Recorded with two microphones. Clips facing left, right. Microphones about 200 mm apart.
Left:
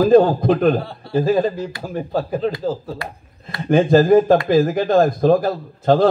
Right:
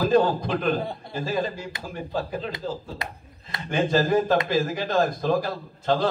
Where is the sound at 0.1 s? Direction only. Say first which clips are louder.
Left 8 dB; 55° left (ahead or behind).